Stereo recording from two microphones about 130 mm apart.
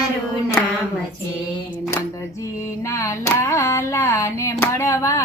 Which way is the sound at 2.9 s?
20° left (ahead or behind).